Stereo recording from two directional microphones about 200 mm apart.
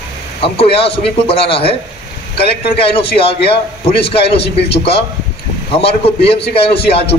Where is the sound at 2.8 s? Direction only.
30° left (ahead or behind).